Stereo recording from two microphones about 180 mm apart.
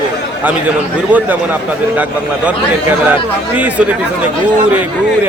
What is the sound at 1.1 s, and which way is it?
Speech, 10° right (ahead or behind).